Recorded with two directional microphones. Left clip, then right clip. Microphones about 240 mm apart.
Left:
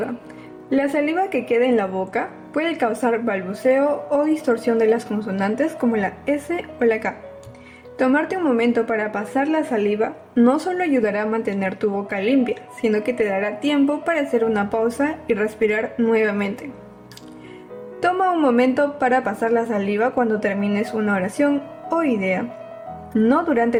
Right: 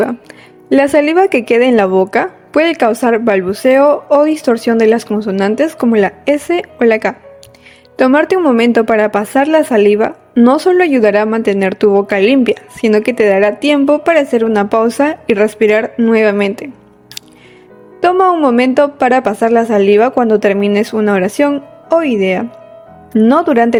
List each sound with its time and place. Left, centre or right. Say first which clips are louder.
0.7 s speech: right 11 dB; right
18.0 s speech: right 9 dB; right